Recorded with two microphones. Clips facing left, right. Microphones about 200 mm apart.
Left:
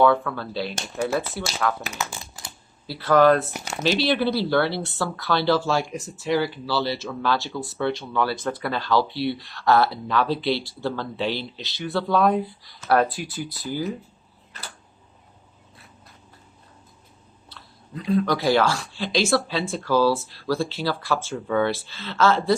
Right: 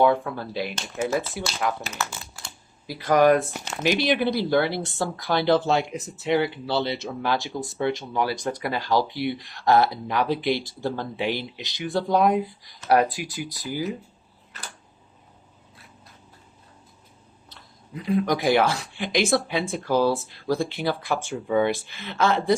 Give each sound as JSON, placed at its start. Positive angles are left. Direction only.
{"t": 0.0, "sound": "speech", "side_deg": -20}
{"t": 1.9, "sound": "typing", "side_deg": 15}
{"t": 2.8, "sound": "speech", "side_deg": -15}
{"t": 3.5, "sound": "speech", "side_deg": 10}
{"t": 3.8, "sound": "speech", "side_deg": -15}
{"t": 17.5, "sound": "speech", "side_deg": -15}